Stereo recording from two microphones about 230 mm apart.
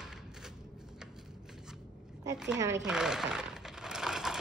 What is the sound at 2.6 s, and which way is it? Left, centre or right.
Speech, centre.